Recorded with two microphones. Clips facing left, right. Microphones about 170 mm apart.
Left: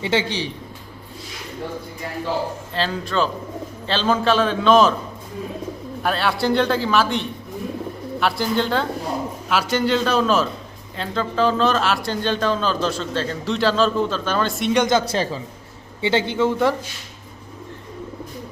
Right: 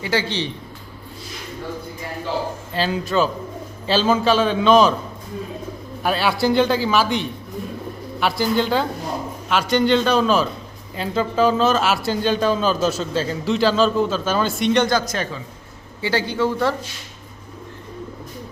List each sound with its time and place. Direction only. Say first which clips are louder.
0.0 s speech: left 1 dB; 20° left (ahead or behind)
2.7 s a man's voice: right 3 dB; 5° right (ahead or behind)
6.0 s a man's voice: right 2 dB; 5° right (ahead or behind)
14.8 s speech: left 2 dB; 25° left (ahead or behind)